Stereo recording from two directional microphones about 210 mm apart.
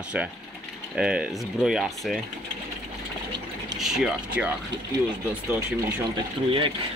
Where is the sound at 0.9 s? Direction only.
5° right (ahead or behind).